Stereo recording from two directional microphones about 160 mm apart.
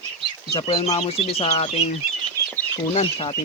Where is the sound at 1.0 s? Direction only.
40° left (ahead or behind).